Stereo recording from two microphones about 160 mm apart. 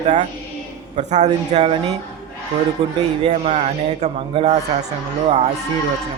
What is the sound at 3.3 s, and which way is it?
A man's voice, 45° right (ahead or behind).